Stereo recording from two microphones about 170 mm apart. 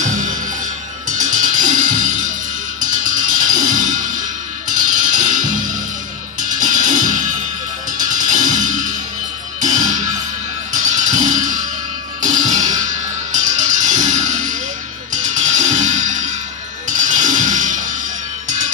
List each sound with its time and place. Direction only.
0.0 s music: 50° right (ahead or behind)